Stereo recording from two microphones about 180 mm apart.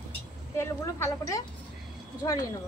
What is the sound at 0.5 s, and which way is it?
A woman's voice, 15° left (ahead or behind).